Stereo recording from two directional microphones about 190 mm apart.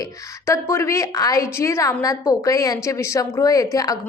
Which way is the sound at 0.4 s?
15° left (ahead or behind).